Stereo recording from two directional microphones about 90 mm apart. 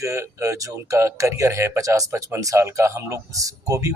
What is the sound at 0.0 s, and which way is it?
Speech, 35° right (ahead or behind).